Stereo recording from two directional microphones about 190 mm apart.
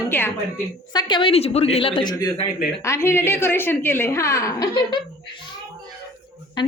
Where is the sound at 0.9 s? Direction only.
25° left (ahead or behind).